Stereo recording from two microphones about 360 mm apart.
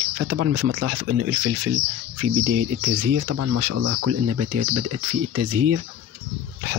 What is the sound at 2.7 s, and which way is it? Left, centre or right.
Speech, right.